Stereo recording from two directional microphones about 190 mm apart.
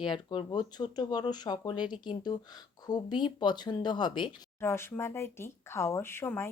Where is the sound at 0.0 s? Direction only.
25° left (ahead or behind).